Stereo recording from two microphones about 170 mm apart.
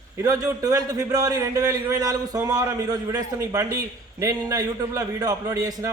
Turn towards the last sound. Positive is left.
turn(degrees=-20)  # may be behind; listen again after turning